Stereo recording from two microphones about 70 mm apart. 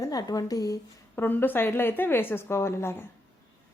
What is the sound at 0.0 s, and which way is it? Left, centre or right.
Speech, left.